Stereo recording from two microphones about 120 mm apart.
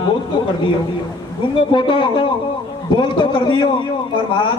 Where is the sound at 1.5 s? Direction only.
45° left (ahead or behind).